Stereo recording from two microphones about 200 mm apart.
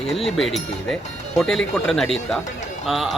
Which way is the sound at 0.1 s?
Centre (ahead or behind).